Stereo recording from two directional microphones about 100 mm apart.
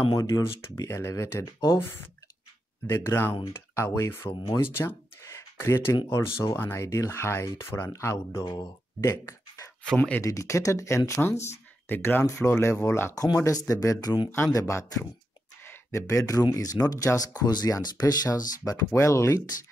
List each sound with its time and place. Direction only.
0.1 s speech: 35° left (ahead or behind)
4.7 s a sound: 25° left (ahead or behind)
6.0 s speech: 25° left (ahead or behind)
8.5 s speech: 45° left (ahead or behind)
9.0 s a sound: 30° left (ahead or behind)
9.9 s speech: 15° left (ahead or behind)
10.2 s speech: 30° left (ahead or behind)
13.1 s speech: 40° left (ahead or behind)
15.6 s a sound: 25° left (ahead or behind)
16.5 s speech: 40° left (ahead or behind)
18.9 s speech: 30° left (ahead or behind)